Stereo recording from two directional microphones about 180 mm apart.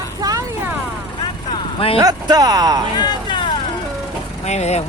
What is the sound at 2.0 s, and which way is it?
Speech, 20° right (ahead or behind).